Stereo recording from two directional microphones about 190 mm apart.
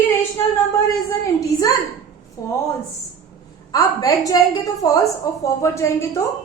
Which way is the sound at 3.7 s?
20° left (ahead or behind).